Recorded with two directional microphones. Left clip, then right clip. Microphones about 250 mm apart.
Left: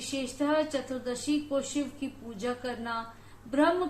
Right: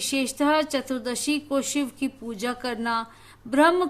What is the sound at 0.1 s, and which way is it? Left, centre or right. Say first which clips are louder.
Speech: right 6 dB; right.